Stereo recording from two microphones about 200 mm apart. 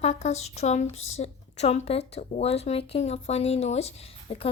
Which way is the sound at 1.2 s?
30° left (ahead or behind).